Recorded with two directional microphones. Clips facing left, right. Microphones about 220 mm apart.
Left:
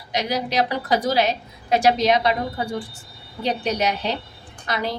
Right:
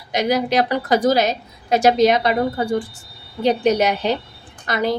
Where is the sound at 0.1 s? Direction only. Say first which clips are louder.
Right 6 dB; 50° right (ahead or behind).